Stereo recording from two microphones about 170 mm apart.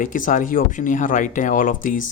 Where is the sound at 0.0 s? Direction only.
50° left (ahead or behind).